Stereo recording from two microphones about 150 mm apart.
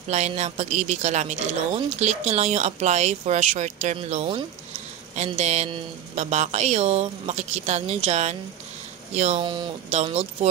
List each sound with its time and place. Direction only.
0.1 s speech: 50° right (ahead or behind)
9.4 s speech: 30° right (ahead or behind)
9.8 s speech: 45° right (ahead or behind)